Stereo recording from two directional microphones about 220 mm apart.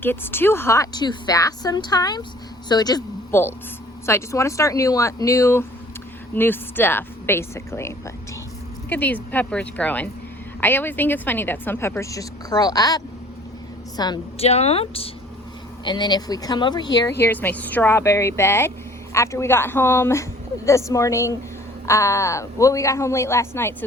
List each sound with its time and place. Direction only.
0.0 s a woman's voice: 10° left (ahead or behind)